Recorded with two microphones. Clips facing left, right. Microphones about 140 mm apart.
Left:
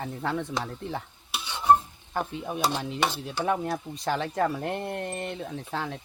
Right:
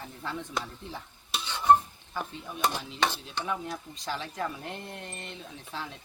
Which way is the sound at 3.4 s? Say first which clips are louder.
Left 8 dB; 65° left (ahead or behind).